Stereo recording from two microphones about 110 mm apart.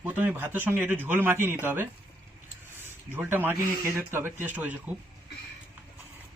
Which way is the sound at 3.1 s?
20° right (ahead or behind).